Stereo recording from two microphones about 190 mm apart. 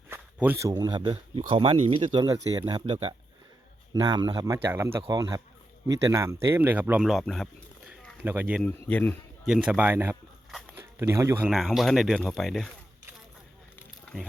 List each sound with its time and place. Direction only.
0.1 s a man's voice: 10° right (ahead or behind)
8.6 s speech: 10° left (ahead or behind)
9.4 s speech: 5° right (ahead or behind)
11.4 s speech: centre (ahead or behind)